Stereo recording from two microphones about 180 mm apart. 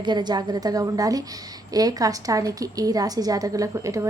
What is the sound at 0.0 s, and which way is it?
A woman's voice, 25° right (ahead or behind).